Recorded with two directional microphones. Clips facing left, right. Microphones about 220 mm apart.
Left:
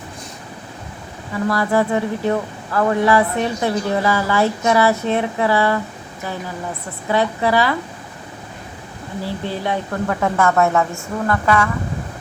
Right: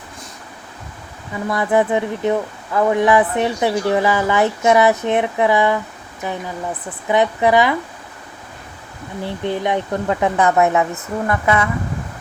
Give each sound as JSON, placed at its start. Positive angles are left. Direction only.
{"t": 1.5, "sound": "a woman's voice", "side_deg": -20}
{"t": 7.1, "sound": "a woman's voice", "side_deg": -20}
{"t": 9.2, "sound": "speech", "side_deg": -20}